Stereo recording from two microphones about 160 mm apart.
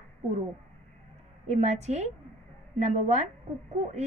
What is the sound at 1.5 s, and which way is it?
A woman's voice, 45° right (ahead or behind).